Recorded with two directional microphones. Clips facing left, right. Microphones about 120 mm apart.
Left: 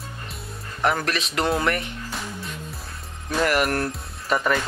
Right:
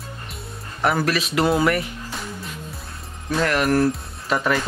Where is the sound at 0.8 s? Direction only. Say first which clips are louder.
Right 3 dB; 5° right (ahead or behind).